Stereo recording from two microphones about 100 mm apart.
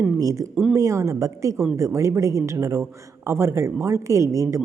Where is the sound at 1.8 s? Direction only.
30° right (ahead or behind).